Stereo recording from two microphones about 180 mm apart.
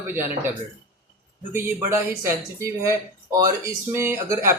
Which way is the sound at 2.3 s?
15° right (ahead or behind).